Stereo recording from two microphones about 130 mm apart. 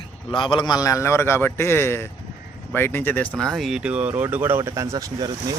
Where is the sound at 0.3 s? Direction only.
40° left (ahead or behind); by 5.3 s 25° right (ahead or behind).